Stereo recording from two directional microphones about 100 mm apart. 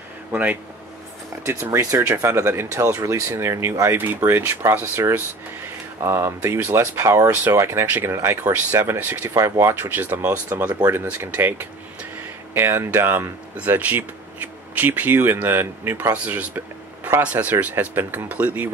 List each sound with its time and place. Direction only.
0.3 s speech: 15° right (ahead or behind)
4.0 s speech: 20° right (ahead or behind)
12.5 s speech: 25° right (ahead or behind)